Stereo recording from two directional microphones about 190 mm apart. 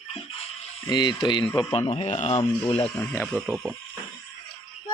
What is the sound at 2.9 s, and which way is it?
Speech, 10° left (ahead or behind).